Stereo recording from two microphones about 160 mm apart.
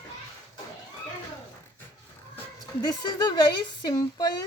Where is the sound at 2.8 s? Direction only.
25° left (ahead or behind).